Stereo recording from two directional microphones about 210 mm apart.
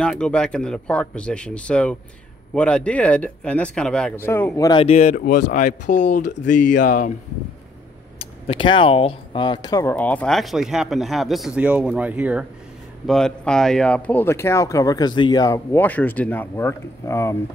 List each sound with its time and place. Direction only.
0.0 s speech: 5° left (ahead or behind)
4.8 s speech: 35° left (ahead or behind)
8.2 s speech: 25° left (ahead or behind)